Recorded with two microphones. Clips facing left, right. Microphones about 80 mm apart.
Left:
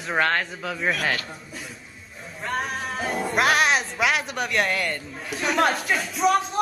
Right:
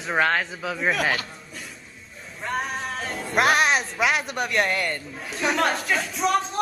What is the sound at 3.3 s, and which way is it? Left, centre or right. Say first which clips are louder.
A man's voice: right 1 dB; centre.